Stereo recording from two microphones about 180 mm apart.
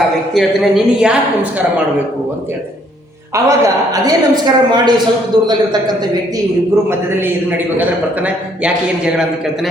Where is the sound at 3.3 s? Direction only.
15° right (ahead or behind).